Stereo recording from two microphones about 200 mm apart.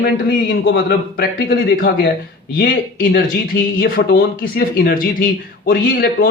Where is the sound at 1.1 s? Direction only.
50° left (ahead or behind).